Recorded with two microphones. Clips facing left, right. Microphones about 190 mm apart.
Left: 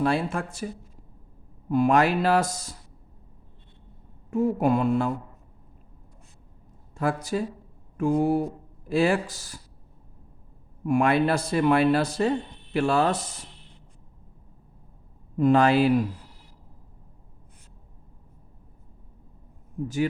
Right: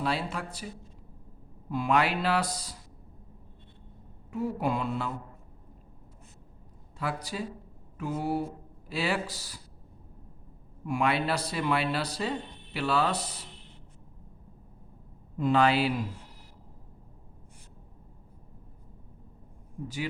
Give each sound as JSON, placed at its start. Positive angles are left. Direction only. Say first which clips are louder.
{"t": 0.0, "sound": "speech", "louder": "left 6 dB", "side_deg": 50}
{"t": 1.7, "sound": "speech", "louder": "left 6 dB", "side_deg": 45}
{"t": 4.3, "sound": "speech", "louder": "left 7 dB", "side_deg": 45}
{"t": 7.0, "sound": "speech", "louder": "left 7 dB", "side_deg": 45}
{"t": 10.8, "sound": "speech", "louder": "left 6 dB", "side_deg": 50}
{"t": 15.4, "sound": "speech", "louder": "left 5 dB", "side_deg": 50}